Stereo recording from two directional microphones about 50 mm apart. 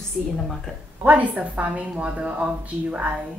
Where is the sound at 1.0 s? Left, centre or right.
Right.